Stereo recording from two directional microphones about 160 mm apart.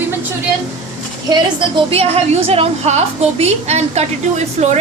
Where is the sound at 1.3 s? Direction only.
30° right (ahead or behind).